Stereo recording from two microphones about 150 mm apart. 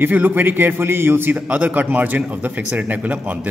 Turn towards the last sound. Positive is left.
turn(degrees=-10)  # may be behind; listen again after turning